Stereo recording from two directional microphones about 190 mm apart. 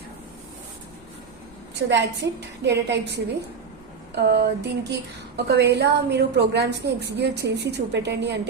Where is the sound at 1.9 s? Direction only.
65° right (ahead or behind).